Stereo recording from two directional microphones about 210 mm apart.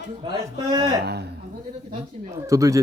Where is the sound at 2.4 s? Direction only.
15° right (ahead or behind).